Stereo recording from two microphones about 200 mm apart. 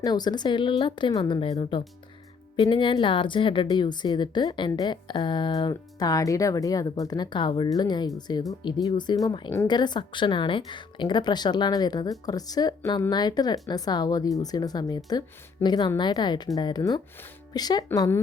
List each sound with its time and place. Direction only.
0.0 s a woman's voice: 20° left (ahead or behind)